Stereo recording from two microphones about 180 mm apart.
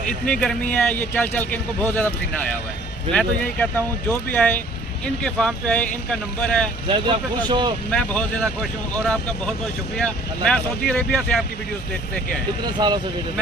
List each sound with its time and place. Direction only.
0.3 s speech: 5° left (ahead or behind)
6.9 s speech: 25° right (ahead or behind)
7.9 s speech: 5° left (ahead or behind)
10.0 s speech: 5° left (ahead or behind)
12.8 s speech: 25° right (ahead or behind)